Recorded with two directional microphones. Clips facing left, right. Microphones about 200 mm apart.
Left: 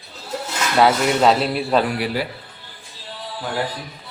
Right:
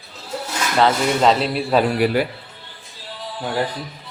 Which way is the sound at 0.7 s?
5° left (ahead or behind).